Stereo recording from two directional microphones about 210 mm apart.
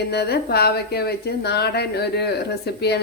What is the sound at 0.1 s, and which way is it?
Speech, 50° left (ahead or behind).